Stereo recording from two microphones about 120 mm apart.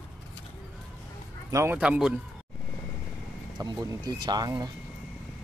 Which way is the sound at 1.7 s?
10° right (ahead or behind).